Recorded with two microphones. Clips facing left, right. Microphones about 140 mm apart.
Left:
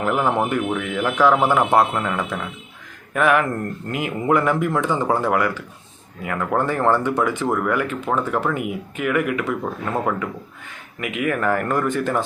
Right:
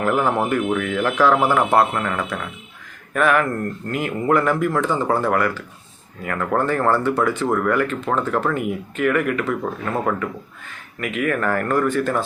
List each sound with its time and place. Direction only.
0.3 s speech: 15° left (ahead or behind)